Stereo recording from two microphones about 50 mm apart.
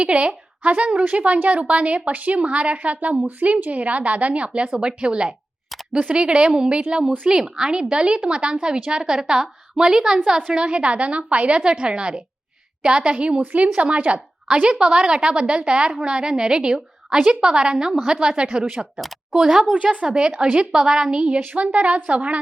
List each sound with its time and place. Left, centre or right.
0.0 s a woman's voice: right
19.7 s a woman's voice: right
21.4 s a woman's voice: right